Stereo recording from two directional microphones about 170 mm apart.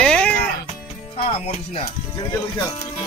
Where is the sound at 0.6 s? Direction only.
40° left (ahead or behind).